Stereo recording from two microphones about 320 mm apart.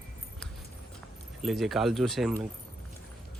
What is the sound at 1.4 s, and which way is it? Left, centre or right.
Speech, centre.